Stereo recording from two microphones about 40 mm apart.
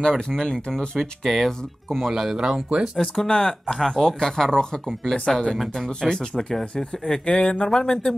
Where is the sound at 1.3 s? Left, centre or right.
Centre.